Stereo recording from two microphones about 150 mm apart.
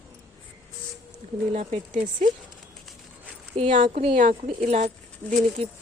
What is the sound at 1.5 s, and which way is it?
Speech, 50° right (ahead or behind).